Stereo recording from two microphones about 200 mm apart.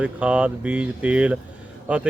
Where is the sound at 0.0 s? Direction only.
5° right (ahead or behind).